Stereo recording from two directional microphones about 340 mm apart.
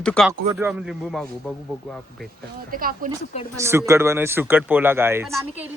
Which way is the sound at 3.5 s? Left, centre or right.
Centre.